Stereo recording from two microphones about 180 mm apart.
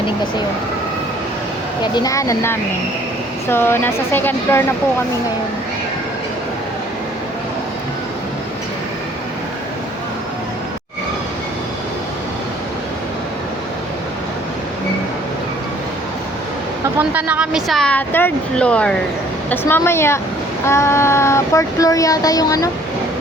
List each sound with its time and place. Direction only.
1.8 s speech: 25° left (ahead or behind)
3.5 s child singing: 10° left (ahead or behind)
17.0 s speech: 10° right (ahead or behind)
19.5 s child singing: 10° left (ahead or behind)